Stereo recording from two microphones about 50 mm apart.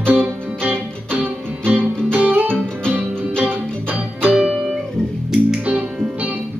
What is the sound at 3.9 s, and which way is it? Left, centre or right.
Music, right.